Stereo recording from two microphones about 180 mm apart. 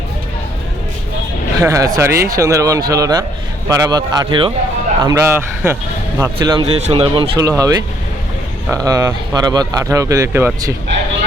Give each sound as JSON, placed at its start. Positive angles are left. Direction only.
{"t": 1.6, "sound": "speech", "side_deg": -20}
{"t": 5.0, "sound": "speech", "side_deg": -15}